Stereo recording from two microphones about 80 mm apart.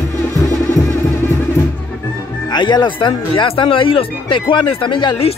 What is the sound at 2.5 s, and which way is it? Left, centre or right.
Speech, left.